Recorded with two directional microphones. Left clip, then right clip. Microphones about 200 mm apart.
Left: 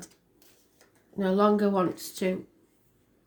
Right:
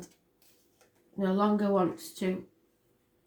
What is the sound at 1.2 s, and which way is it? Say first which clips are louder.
Speech: left 5 dB; 50° left (ahead or behind).